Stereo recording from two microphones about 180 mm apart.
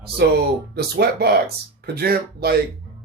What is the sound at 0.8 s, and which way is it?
Speech, 60° right (ahead or behind).